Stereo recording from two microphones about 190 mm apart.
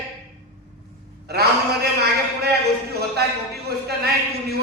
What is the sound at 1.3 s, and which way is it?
A man's voice, 55° right (ahead or behind).